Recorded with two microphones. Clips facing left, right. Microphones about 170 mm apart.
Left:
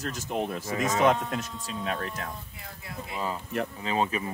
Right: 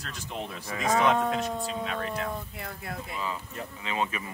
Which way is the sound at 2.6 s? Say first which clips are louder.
Right 6 dB; 65° right (ahead or behind).